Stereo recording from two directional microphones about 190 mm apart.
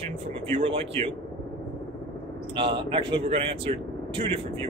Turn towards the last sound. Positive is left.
turn(degrees=-30)  # may be behind; listen again after turning